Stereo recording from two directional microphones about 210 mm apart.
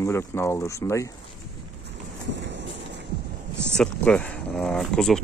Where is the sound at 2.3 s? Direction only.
60° right (ahead or behind).